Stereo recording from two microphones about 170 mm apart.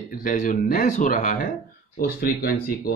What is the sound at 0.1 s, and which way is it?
Speech, 50° left (ahead or behind).